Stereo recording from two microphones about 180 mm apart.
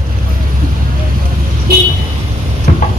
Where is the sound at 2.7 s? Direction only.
50° left (ahead or behind).